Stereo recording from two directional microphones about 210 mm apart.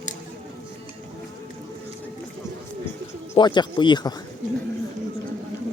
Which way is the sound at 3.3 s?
20° left (ahead or behind).